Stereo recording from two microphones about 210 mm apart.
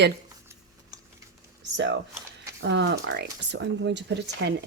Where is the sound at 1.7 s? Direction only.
60° right (ahead or behind).